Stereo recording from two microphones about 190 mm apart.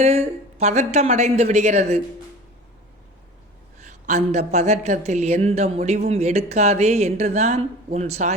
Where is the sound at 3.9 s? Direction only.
40° right (ahead or behind).